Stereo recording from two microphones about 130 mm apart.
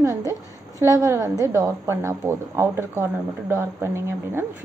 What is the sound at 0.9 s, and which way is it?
A woman's voice, 25° right (ahead or behind).